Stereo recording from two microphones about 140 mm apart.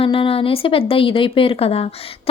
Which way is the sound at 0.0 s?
40° left (ahead or behind).